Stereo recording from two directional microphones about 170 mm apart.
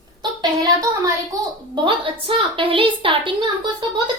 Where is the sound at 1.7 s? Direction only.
30° right (ahead or behind).